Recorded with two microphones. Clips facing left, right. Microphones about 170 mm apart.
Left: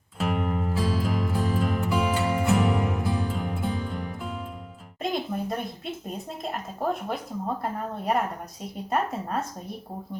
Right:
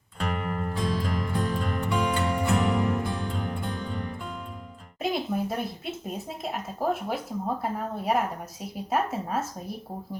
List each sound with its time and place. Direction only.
0.2 s music: 5° left (ahead or behind)
5.0 s a sound: 5° right (ahead or behind)
7.6 s speech: centre (ahead or behind)